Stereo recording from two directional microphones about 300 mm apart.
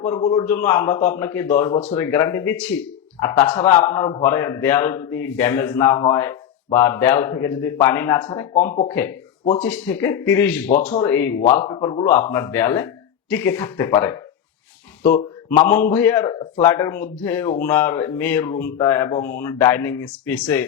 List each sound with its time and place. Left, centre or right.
0.3 s a man's voice: centre
1.7 s speech: left
2.0 s a man's voice: centre
8.7 s speech: left
9.6 s a man's voice: centre
15.0 s a sound: left
15.7 s speech: left
16.0 s a man's voice: centre